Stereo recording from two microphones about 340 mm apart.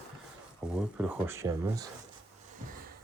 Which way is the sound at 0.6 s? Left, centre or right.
Centre.